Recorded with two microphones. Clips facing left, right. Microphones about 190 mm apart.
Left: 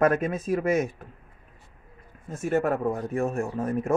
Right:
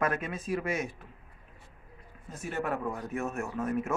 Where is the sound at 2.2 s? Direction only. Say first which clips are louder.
Left 9 dB; 45° left (ahead or behind).